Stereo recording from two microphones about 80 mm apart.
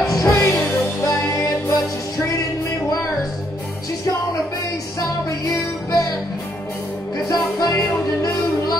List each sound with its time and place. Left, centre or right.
0.1 s music: left
5.5 s music: left
7.2 s music: left